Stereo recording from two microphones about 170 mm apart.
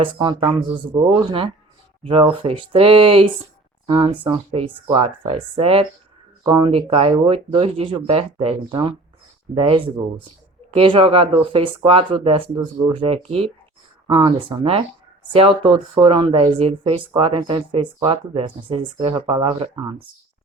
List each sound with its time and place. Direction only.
0.0 s speech: 30° right (ahead or behind)